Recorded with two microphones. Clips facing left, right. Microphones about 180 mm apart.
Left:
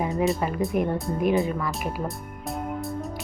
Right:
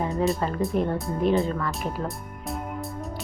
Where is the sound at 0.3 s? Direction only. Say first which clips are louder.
Even; 15° left (ahead or behind).